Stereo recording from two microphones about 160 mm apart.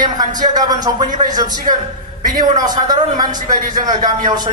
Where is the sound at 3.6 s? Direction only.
55° right (ahead or behind).